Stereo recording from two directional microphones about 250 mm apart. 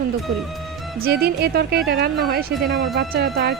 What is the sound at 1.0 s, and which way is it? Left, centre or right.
Speech, right.